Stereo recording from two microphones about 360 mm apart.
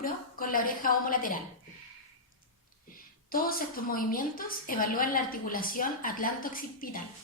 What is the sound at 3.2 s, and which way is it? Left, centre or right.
A woman's voice, left.